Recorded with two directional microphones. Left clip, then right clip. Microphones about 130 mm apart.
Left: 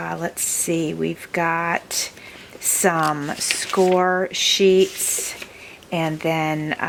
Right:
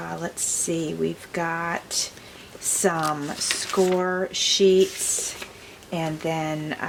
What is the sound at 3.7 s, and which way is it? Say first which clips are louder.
Speech: left 4 dB; centre (ahead or behind).